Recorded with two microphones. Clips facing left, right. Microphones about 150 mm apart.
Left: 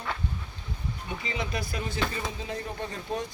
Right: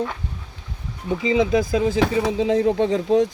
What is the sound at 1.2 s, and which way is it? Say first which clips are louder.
Speech: right 16 dB; 90° right.